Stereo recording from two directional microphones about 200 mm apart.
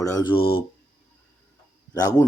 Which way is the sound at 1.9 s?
20° left (ahead or behind).